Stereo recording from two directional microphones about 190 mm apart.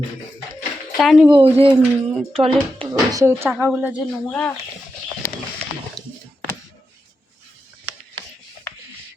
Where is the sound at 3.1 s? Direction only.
15° right (ahead or behind).